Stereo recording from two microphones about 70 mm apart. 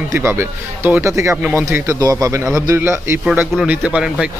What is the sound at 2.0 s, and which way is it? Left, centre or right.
Speech, right.